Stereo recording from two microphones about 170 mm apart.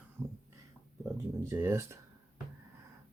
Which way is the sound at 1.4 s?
15° right (ahead or behind).